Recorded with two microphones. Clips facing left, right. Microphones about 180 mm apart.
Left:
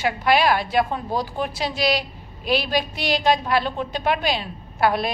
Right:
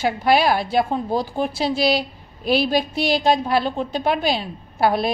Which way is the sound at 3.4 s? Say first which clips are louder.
Right 2 dB; 35° right (ahead or behind).